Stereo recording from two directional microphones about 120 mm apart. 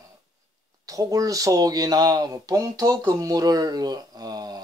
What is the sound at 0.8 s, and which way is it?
Speech, 30° right (ahead or behind).